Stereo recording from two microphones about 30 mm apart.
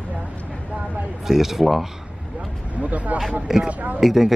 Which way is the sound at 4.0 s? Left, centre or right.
Centre.